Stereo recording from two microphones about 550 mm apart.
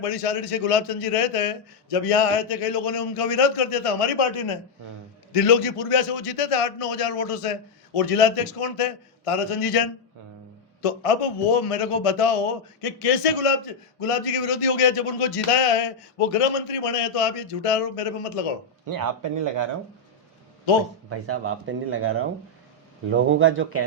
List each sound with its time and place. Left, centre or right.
0.0 s a man's voice: left
10.8 s a man's voice: left
14.0 s a man's voice: left
18.9 s speech: right
21.1 s speech: right